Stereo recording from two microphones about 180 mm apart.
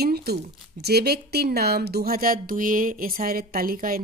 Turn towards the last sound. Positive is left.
turn(degrees=-55)  # may be behind; listen again after turning